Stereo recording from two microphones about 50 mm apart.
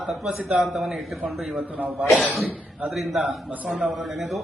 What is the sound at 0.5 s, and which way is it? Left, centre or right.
A man's voice, centre.